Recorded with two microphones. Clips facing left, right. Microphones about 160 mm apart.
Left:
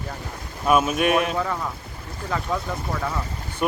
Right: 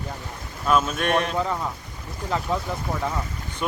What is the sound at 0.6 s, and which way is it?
Speech, 10° left (ahead or behind).